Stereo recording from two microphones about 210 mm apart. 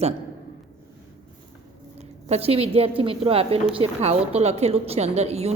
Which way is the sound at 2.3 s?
30° right (ahead or behind).